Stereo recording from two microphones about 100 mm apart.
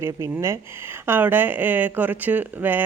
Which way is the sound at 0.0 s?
25° right (ahead or behind).